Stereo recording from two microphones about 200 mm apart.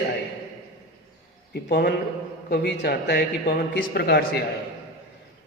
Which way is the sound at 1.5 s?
55° left (ahead or behind).